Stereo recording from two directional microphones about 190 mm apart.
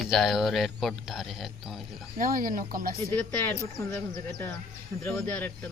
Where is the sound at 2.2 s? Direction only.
45° right (ahead or behind).